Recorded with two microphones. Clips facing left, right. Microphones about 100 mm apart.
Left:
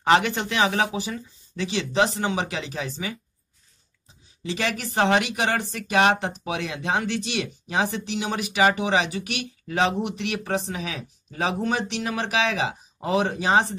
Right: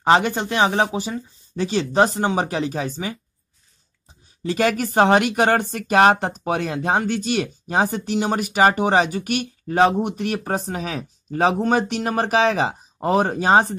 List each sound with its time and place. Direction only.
0.0 s speech: 35° right (ahead or behind)
4.4 s speech: 45° right (ahead or behind)